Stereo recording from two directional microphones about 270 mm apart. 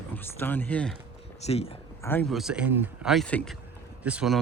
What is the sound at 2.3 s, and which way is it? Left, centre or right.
Speech, centre.